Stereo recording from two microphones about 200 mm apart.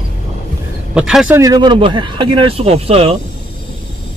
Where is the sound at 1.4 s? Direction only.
20° right (ahead or behind).